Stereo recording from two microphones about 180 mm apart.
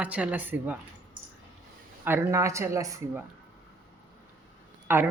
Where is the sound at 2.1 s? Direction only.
15° right (ahead or behind).